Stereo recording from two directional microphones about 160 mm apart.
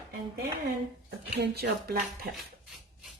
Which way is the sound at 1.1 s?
90° right.